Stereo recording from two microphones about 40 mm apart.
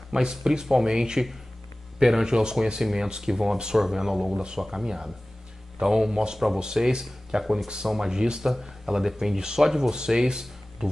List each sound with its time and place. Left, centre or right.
0.1 s speech: centre